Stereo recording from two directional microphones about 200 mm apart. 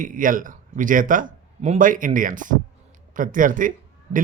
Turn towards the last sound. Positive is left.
turn(degrees=-40)  # may be behind; listen again after turning